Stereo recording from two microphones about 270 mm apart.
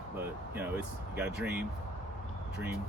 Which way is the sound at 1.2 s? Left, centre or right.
Centre.